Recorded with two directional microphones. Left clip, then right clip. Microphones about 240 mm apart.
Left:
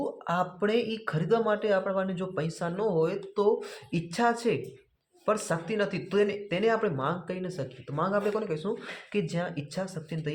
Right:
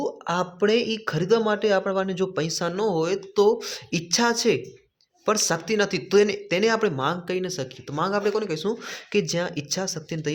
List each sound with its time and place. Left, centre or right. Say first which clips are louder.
0.0 s speech: right 3 dB; right